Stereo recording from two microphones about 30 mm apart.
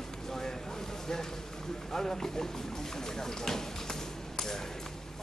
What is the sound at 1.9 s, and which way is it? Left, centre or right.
Speech, centre.